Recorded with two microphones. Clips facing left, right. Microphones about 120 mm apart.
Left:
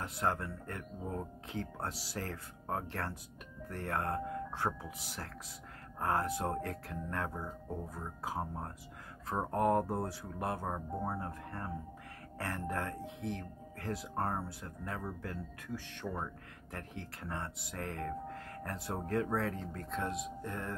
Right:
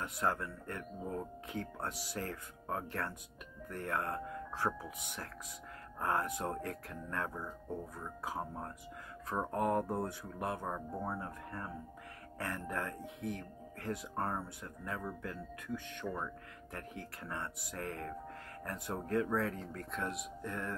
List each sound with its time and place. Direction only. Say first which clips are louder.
0.0 s speech: left 1 dB; 30° left (ahead or behind)
12.6 s speech: left 2 dB; 30° left (ahead or behind)
16.7 s speech: left 1 dB; 35° left (ahead or behind)